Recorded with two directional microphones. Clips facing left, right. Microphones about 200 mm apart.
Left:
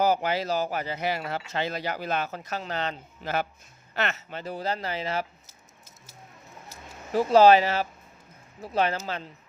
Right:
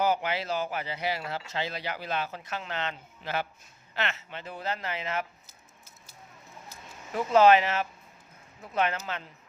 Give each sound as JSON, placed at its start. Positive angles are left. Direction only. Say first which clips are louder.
{"t": 0.0, "sound": "speech", "louder": "left 3 dB", "side_deg": 40}
{"t": 7.1, "sound": "speech", "louder": "left 3 dB", "side_deg": 35}